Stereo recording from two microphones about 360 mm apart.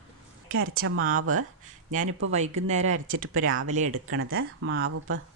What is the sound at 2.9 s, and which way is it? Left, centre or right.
Speech, right.